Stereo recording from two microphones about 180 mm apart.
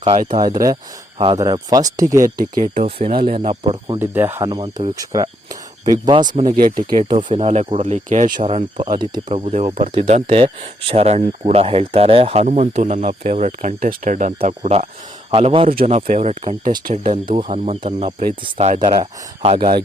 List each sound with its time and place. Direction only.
0.3 s speech: 25° right (ahead or behind)
2.2 s speech: 45° right (ahead or behind); by 3.9 s 30° right (ahead or behind)
3.9 s speech: 10° right (ahead or behind)
7.3 s speech: 40° right (ahead or behind)
19.4 s speech: 30° right (ahead or behind)